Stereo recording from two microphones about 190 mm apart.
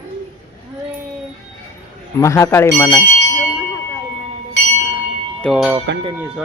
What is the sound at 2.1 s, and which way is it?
Speech, 15° left (ahead or behind).